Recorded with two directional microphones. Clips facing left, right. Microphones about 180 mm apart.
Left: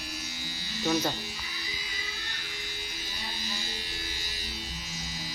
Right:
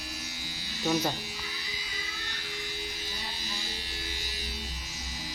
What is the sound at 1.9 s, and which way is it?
Music, centre (ahead or behind).